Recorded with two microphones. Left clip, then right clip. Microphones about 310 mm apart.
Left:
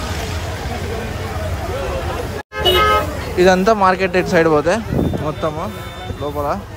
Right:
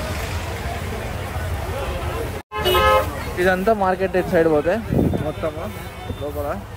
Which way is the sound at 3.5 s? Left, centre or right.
Right.